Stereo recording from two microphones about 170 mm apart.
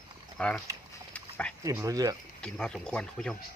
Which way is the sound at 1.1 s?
5° left (ahead or behind).